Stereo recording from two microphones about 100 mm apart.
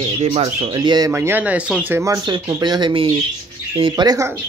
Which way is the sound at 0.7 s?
45° right (ahead or behind).